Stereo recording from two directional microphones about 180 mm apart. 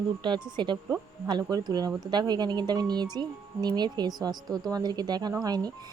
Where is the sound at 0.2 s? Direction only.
25° right (ahead or behind).